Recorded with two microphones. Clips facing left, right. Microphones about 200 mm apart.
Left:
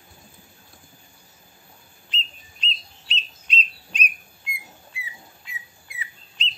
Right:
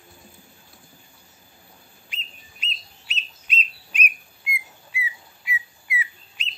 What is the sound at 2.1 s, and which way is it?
Whistle, 10° right (ahead or behind).